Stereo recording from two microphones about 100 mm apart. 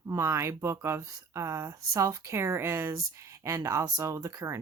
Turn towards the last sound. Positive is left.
turn(degrees=-30)  # may be behind; listen again after turning